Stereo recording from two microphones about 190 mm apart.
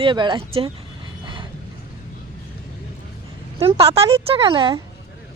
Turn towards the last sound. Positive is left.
turn(degrees=-25)  # may be behind; listen again after turning